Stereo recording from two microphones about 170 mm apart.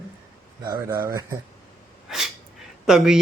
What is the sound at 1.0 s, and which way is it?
Speech, 15° right (ahead or behind).